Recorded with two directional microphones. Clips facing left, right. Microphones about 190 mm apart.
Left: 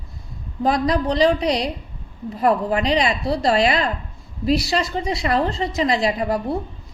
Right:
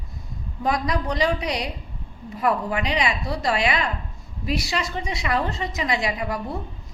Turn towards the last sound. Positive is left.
turn(degrees=35)  # may be behind; listen again after turning